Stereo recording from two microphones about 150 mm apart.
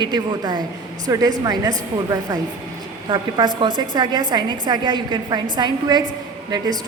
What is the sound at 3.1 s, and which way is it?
A woman's voice, 30° right (ahead or behind).